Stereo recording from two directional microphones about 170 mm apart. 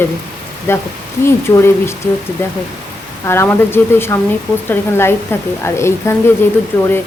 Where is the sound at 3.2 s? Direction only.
15° left (ahead or behind).